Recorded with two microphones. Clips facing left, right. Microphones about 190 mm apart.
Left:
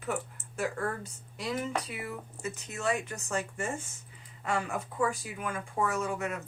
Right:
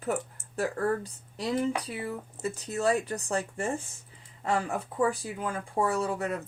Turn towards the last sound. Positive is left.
turn(degrees=-35)  # may be behind; listen again after turning